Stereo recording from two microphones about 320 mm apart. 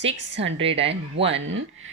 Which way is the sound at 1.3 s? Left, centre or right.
Right.